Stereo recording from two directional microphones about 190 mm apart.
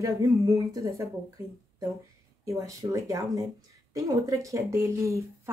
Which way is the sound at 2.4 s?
15° right (ahead or behind).